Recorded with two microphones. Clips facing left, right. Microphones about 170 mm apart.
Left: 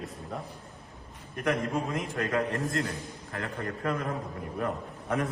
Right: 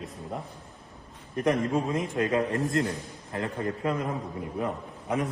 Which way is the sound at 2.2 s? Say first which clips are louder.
Right 3 dB; 20° right (ahead or behind).